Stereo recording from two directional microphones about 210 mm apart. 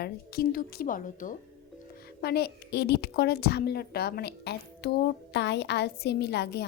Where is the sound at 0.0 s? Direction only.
45° left (ahead or behind).